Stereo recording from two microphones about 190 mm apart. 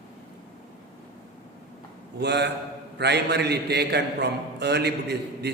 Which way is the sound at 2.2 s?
60° right (ahead or behind).